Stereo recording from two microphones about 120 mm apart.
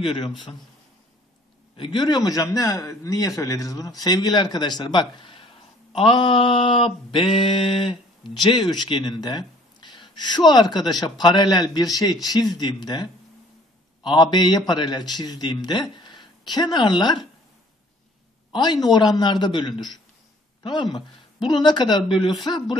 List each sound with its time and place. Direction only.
0.0 s a man's voice: 45° left (ahead or behind)
1.8 s mantra: 40° left (ahead or behind)
18.5 s mantra: 35° left (ahead or behind)